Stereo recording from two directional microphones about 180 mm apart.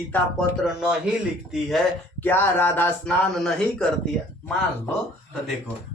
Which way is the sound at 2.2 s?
10° left (ahead or behind).